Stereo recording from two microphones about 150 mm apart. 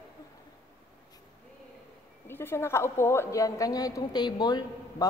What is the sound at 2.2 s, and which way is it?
A woman's voice, 15° left (ahead or behind).